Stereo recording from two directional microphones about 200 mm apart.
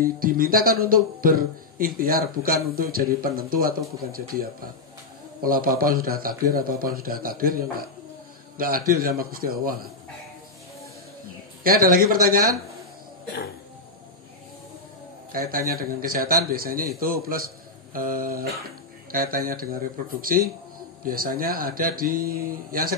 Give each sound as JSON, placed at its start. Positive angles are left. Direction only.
{"t": 0.0, "sound": "speech", "side_deg": -45}
{"t": 11.6, "sound": "speech", "side_deg": -45}
{"t": 15.5, "sound": "speech", "side_deg": -45}